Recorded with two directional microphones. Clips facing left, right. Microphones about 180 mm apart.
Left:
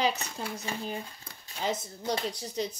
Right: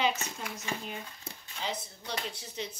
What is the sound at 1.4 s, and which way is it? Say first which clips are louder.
Speech: left 5 dB; 45° left (ahead or behind).